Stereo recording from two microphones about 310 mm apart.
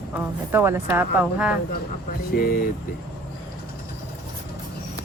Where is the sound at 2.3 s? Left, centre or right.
Left.